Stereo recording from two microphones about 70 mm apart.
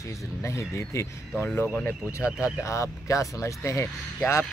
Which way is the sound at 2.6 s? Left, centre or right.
Left.